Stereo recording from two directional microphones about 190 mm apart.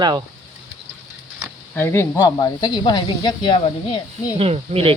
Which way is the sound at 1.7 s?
10° left (ahead or behind).